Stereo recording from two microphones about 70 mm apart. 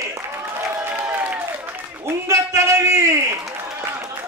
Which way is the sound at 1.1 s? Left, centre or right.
Right.